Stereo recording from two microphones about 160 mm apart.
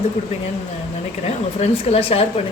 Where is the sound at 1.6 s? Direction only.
40° left (ahead or behind).